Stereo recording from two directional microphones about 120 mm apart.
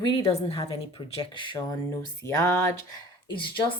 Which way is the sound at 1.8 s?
25° left (ahead or behind).